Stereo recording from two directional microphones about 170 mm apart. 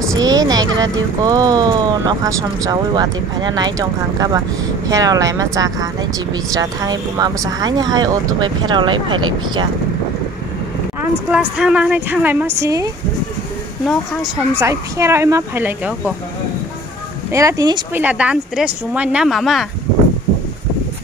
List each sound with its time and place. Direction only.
0.2 s speech: 25° right (ahead or behind)
11.0 s a woman's voice: 10° right (ahead or behind)
14.6 s a woman's voice: 15° right (ahead or behind)
17.3 s speech: 20° right (ahead or behind)
17.9 s speech: 10° right (ahead or behind)